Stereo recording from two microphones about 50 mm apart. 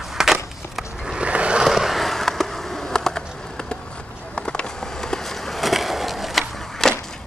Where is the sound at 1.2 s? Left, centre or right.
Right.